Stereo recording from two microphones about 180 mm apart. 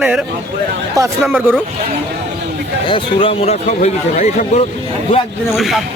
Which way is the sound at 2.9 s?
30° left (ahead or behind).